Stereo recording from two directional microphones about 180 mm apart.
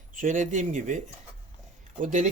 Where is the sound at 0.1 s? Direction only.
45° right (ahead or behind).